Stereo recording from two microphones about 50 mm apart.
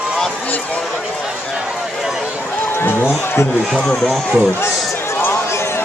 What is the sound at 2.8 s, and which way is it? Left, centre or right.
Speech, left.